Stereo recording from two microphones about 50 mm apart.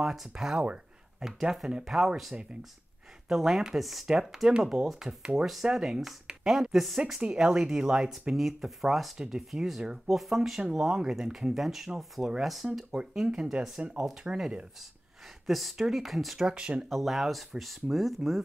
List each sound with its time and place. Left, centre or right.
0.0 s speech: centre
4.8 s speech: centre
5.2 s speech: centre
7.2 s speech: centre
8.1 s speech: centre
13.4 s speech: right
15.4 s speech: centre
16.3 s speech: centre
16.9 s speech: centre